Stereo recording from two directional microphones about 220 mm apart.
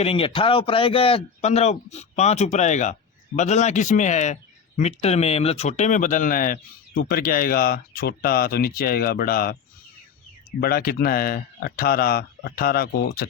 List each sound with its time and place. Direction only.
0.0 s a man's voice: 25° left (ahead or behind); by 9.6 s 40° left (ahead or behind)
10.6 s speech: 45° left (ahead or behind)